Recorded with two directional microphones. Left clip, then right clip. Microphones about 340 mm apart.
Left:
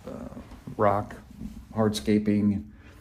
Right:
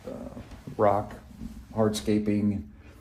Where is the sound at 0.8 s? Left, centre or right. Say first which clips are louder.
Even; left.